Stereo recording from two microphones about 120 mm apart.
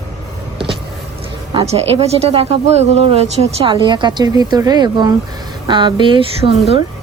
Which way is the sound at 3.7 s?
40° right (ahead or behind).